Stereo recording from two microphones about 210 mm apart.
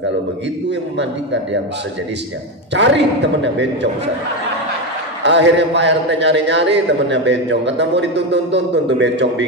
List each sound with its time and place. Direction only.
0.7 s a man's voice: 55° right (ahead or behind)
2.7 s a man's voice: 60° right (ahead or behind)
5.2 s a man's voice: 55° right (ahead or behind)